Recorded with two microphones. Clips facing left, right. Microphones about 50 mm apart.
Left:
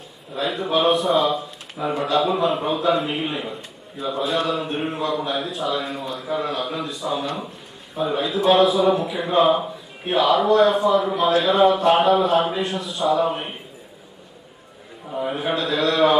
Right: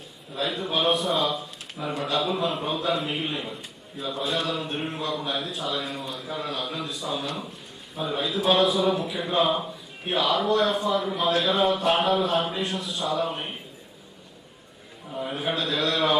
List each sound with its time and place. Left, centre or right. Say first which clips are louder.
0.3 s speech: left 5 dB; centre
15.1 s speech: left 5 dB; centre